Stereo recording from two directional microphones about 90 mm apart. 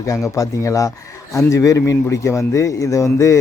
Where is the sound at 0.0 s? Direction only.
35° left (ahead or behind).